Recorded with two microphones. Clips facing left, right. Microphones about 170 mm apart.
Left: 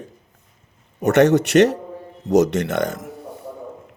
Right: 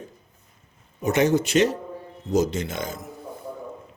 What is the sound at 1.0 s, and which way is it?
A man's voice, 70° left (ahead or behind).